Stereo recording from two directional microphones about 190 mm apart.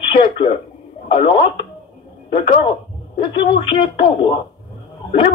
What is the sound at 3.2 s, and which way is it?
A man's voice, 25° left (ahead or behind).